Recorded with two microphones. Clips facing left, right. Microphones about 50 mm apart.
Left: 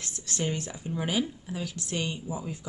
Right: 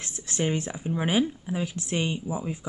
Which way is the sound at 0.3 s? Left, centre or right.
Right.